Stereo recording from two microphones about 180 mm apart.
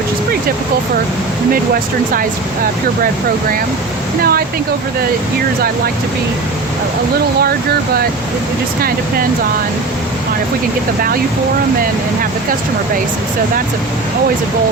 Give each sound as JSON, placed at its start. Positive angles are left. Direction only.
{"t": 4.2, "sound": "speech", "side_deg": -55}